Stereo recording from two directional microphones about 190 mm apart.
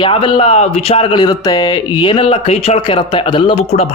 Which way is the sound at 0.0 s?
25° left (ahead or behind).